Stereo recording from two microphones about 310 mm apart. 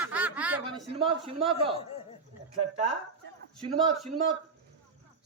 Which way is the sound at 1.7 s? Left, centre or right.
Centre.